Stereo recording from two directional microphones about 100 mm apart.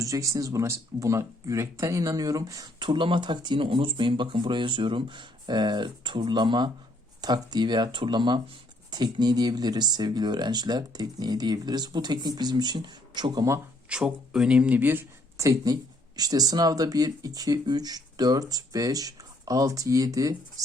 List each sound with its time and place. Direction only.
0.0 s speech: 30° right (ahead or behind)
13.9 s speech: 10° right (ahead or behind); by 20.3 s 35° right (ahead or behind)